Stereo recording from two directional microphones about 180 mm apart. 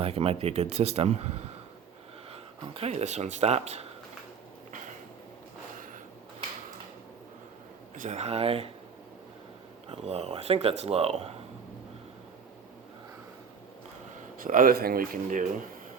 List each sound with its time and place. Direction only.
0.0 s speech: 35° right (ahead or behind)
2.3 s speech: 35° right (ahead or behind)
7.9 s speech: 40° right (ahead or behind)
9.9 s speech: 35° right (ahead or behind)
14.3 s speech: 50° right (ahead or behind)